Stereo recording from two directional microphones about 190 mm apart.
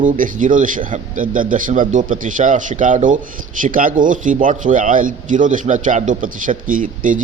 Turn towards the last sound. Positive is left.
turn(degrees=-45)  # may be behind; listen again after turning